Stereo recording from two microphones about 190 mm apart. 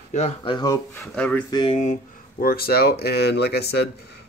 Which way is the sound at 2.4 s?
50° left (ahead or behind).